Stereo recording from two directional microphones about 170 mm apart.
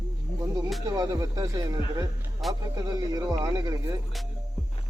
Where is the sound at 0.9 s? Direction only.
20° right (ahead or behind).